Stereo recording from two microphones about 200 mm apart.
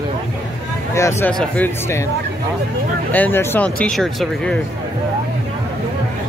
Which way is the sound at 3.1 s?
10° left (ahead or behind).